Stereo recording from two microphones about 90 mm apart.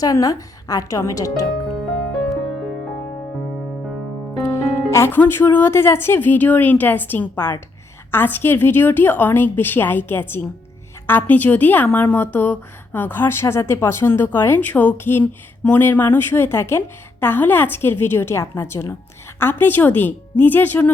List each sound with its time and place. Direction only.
0.0 s a woman's voice: 40° left (ahead or behind)
4.4 s speech: 30° left (ahead or behind)